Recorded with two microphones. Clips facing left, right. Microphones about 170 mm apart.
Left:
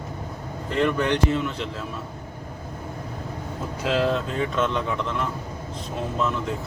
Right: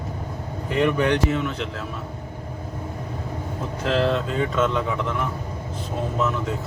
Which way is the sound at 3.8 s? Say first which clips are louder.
Right 1 dB; 5° left (ahead or behind).